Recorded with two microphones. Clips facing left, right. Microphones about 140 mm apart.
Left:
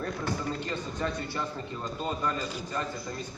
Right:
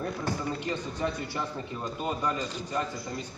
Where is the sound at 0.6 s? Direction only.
15° right (ahead or behind).